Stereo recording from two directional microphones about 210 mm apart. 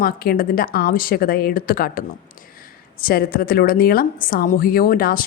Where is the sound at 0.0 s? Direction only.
45° left (ahead or behind).